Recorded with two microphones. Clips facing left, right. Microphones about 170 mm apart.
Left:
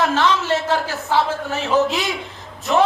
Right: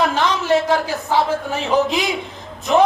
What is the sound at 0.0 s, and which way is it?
A man's voice, 15° right (ahead or behind).